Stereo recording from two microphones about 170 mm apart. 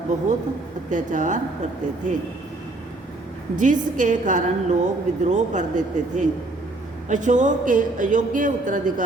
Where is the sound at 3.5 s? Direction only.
50° right (ahead or behind).